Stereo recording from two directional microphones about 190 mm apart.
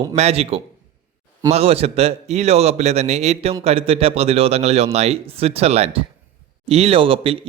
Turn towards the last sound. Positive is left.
turn(degrees=-30)  # may be behind; listen again after turning